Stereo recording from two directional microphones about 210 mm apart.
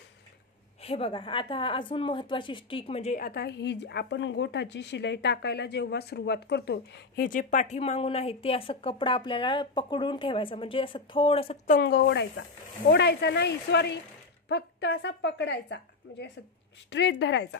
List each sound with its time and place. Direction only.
0.8 s a woman's voice: 25° left (ahead or behind)
3.3 s speech: 50° left (ahead or behind); by 11.7 s 25° left (ahead or behind)
11.7 s a woman's voice: 50° left (ahead or behind)